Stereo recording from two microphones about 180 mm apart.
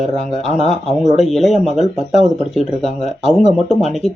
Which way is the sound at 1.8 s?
40° left (ahead or behind).